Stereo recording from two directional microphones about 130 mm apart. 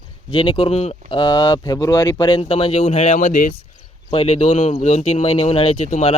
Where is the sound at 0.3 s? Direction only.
40° left (ahead or behind).